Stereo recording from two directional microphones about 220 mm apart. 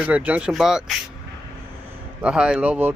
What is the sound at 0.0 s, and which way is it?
Speech, 5° right (ahead or behind).